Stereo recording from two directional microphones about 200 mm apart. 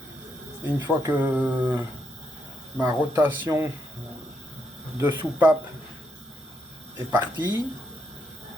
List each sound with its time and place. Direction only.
0.8 s speech: 10° right (ahead or behind)
4.9 s speech: 10° right (ahead or behind)
6.9 s speech: 20° right (ahead or behind)